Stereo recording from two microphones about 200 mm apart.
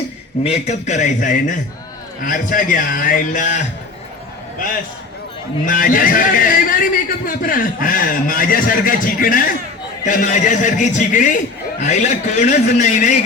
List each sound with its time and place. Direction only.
0.4 s a man's voice: 35° left (ahead or behind)
5.6 s a man's voice: 45° left (ahead or behind)